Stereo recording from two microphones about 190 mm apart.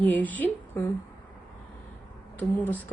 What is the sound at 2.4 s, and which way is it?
Speech, 10° left (ahead or behind).